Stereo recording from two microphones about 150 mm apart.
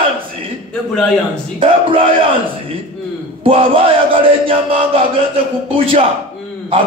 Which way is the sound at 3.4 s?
40° right (ahead or behind).